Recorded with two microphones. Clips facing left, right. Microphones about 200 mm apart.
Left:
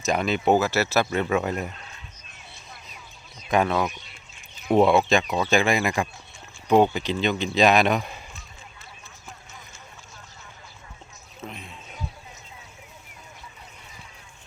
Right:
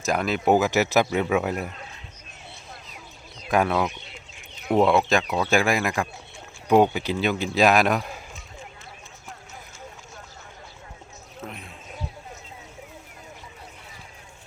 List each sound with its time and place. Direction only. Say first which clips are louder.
0.0 s speech: even; centre (ahead or behind)
0.5 s speech: right 3 dB; 15° right (ahead or behind)
3.5 s speech: even; 5° right (ahead or behind)
11.3 s speech: even; centre (ahead or behind)